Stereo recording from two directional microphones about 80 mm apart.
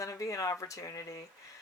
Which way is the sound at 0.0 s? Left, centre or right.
Left.